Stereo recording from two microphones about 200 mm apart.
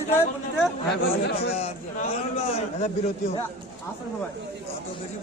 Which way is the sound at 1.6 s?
30° left (ahead or behind).